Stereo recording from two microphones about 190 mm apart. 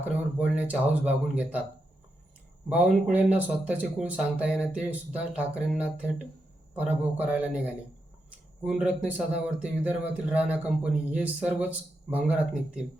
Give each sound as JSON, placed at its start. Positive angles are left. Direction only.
{"t": 0.5, "sound": "speech", "side_deg": -5}
{"t": 2.6, "sound": "speech", "side_deg": -10}
{"t": 8.6, "sound": "speech", "side_deg": -5}